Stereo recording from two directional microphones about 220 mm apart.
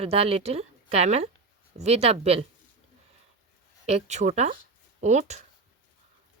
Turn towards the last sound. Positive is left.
turn(degrees=-30)  # may be behind; listen again after turning